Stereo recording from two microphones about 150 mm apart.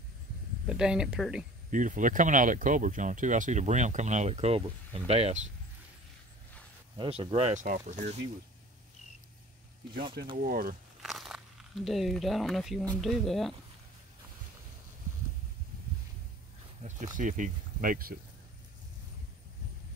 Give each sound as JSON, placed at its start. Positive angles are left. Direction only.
{"t": 0.7, "sound": "speech", "side_deg": -5}
{"t": 1.7, "sound": "speech", "side_deg": -60}
{"t": 7.0, "sound": "speech", "side_deg": -40}
{"t": 7.6, "sound": "speech", "side_deg": -60}
{"t": 10.4, "sound": "speech", "side_deg": -70}
{"t": 11.0, "sound": "a sound", "side_deg": 0}
{"t": 13.0, "sound": "speech", "side_deg": 0}
{"t": 16.8, "sound": "speech", "side_deg": -55}